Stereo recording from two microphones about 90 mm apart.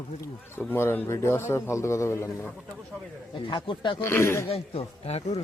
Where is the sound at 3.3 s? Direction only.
70° left (ahead or behind).